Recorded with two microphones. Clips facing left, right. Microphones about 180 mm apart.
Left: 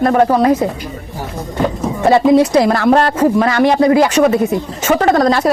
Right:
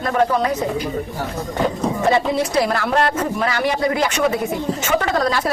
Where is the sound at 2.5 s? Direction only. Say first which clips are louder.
Left 7 dB; 40° left (ahead or behind).